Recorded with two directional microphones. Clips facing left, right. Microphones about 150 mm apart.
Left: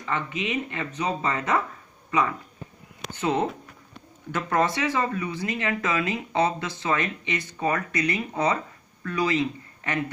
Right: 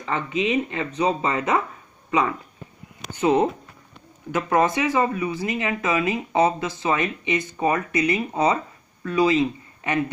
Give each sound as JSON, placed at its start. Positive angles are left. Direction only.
{"t": 0.0, "sound": "speech", "side_deg": -25}
{"t": 3.2, "sound": "speech", "side_deg": -15}